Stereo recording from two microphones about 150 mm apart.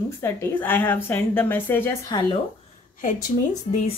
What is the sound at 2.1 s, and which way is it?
Speech, 25° left (ahead or behind).